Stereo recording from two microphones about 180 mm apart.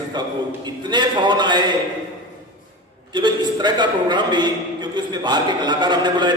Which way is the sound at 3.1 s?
25° right (ahead or behind).